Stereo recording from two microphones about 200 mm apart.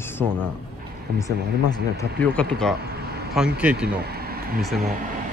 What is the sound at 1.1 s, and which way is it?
Speech, 15° left (ahead or behind).